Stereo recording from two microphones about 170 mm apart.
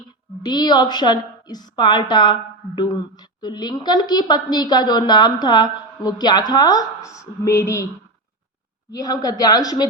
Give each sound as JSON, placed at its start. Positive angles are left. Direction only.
{"t": 0.4, "sound": "a woman's voice", "side_deg": 25}
{"t": 8.9, "sound": "a woman's voice", "side_deg": 20}